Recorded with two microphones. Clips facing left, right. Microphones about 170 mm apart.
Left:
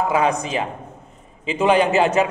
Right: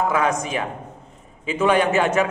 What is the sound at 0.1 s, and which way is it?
A man's voice, 25° left (ahead or behind).